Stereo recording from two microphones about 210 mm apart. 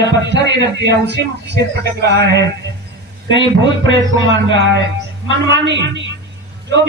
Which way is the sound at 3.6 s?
60° right (ahead or behind).